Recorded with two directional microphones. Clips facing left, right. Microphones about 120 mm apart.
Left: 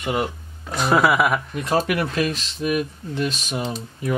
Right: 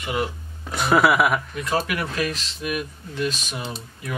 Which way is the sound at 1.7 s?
30° left (ahead or behind).